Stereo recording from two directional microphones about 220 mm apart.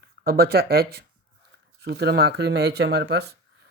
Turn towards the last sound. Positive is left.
turn(degrees=-50)  # may be behind; listen again after turning